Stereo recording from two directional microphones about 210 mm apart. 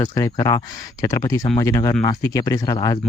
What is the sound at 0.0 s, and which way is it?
Speech, 15° left (ahead or behind).